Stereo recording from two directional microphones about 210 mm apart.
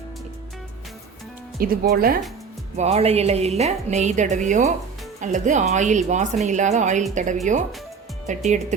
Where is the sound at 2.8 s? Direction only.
30° right (ahead or behind).